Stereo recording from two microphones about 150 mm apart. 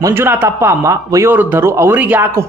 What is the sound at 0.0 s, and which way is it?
A man's voice, 15° right (ahead or behind).